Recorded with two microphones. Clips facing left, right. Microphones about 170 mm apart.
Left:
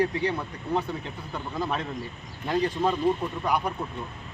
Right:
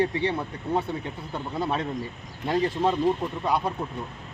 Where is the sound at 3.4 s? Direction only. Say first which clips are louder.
Right 2 dB; 25° right (ahead or behind).